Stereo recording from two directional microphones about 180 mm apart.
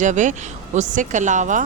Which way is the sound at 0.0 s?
45° right (ahead or behind).